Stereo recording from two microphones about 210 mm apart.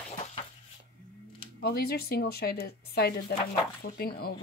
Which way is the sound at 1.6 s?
50° left (ahead or behind).